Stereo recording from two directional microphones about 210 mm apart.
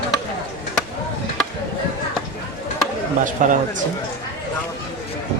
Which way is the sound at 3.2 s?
40° right (ahead or behind).